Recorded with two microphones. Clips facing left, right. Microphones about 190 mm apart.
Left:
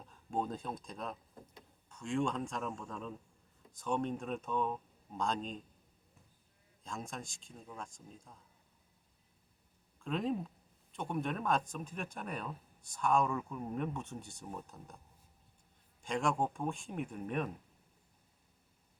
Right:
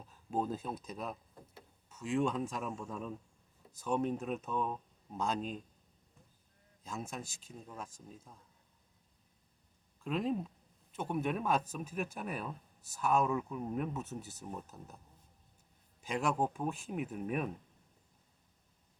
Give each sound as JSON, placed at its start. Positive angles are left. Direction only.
{"t": 0.1, "sound": "speech", "side_deg": -5}
{"t": 6.8, "sound": "speech", "side_deg": -5}
{"t": 10.0, "sound": "speech", "side_deg": -5}
{"t": 16.0, "sound": "speech", "side_deg": -5}